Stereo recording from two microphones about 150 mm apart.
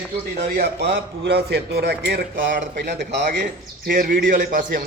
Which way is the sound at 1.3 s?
90° right.